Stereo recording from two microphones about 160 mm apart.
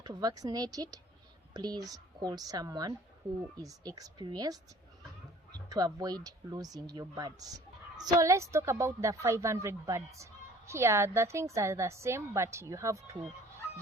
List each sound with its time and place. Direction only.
0.0 s speech: 25° right (ahead or behind)